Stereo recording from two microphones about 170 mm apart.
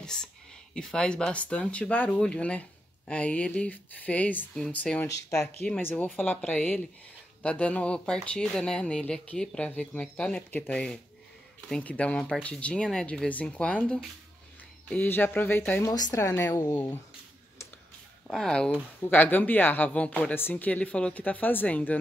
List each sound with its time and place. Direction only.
0.0 s a sound: 5° left (ahead or behind)
0.7 s speech: 5° left (ahead or behind)
5.0 s speech: 15° left (ahead or behind)
18.2 s speech: 5° left (ahead or behind)